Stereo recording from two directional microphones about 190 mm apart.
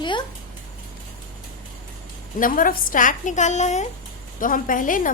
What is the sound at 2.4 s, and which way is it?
A woman's voice, 45° left (ahead or behind).